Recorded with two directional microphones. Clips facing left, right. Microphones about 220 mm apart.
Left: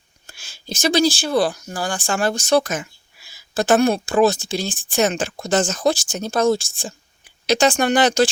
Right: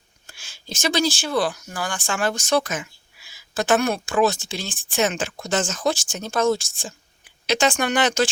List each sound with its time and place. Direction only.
0.3 s speech: 40° left (ahead or behind)